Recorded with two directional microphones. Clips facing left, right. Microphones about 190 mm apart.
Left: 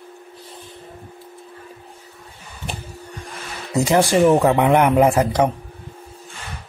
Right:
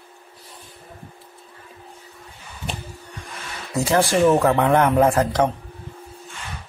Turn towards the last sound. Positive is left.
turn(degrees=15)  # may be behind; listen again after turning